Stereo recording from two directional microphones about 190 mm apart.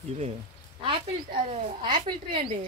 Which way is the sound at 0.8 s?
30° right (ahead or behind).